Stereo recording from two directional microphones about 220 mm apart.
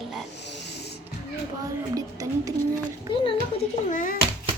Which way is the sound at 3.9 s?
40° left (ahead or behind).